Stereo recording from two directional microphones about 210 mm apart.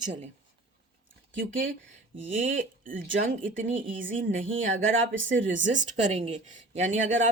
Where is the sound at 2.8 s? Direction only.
40° right (ahead or behind).